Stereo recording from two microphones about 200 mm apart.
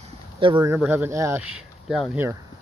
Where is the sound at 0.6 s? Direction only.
10° right (ahead or behind).